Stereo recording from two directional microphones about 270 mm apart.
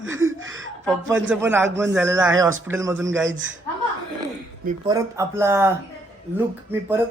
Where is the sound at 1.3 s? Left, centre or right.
Centre.